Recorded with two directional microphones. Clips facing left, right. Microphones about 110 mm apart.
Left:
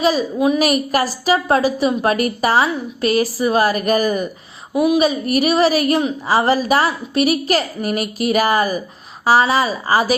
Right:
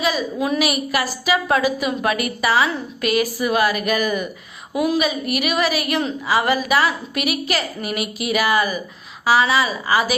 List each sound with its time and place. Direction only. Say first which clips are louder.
0.0 s a woman's voice: left 5 dB; 35° left (ahead or behind)
0.3 s a woman's voice: left 5 dB; 20° left (ahead or behind)
0.6 s a woman's voice: left 4 dB; 40° left (ahead or behind)